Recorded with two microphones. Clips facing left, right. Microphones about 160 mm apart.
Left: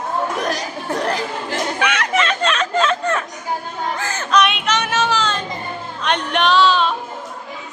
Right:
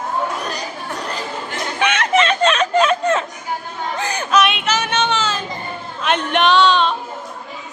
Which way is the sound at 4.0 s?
15° right (ahead or behind).